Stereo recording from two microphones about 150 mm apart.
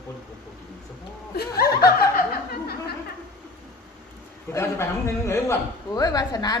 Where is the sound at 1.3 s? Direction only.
90° left.